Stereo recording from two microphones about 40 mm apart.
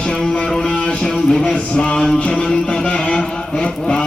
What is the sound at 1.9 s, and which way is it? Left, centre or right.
Music, centre.